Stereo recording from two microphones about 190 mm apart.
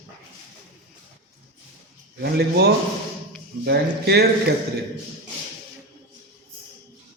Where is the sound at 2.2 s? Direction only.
60° right (ahead or behind).